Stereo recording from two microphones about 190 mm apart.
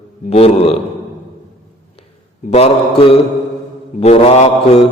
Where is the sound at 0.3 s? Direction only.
30° left (ahead or behind).